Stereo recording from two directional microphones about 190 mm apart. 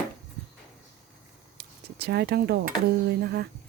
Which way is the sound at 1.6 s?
60° right (ahead or behind).